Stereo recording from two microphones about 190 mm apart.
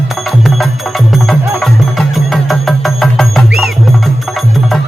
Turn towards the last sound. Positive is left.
turn(degrees=0)  # may be behind; listen again after turning